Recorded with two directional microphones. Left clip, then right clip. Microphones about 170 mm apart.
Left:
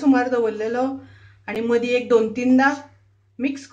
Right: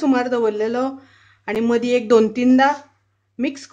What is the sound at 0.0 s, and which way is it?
Speech, 50° right (ahead or behind).